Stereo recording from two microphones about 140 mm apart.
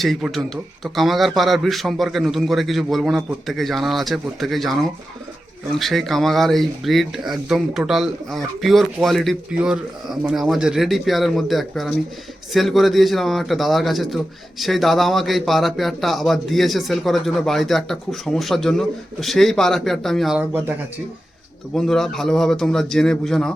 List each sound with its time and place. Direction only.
0.0 s a man's voice: centre (ahead or behind)
20.5 s speech: 15° right (ahead or behind)
21.7 s a man's voice: 5° left (ahead or behind)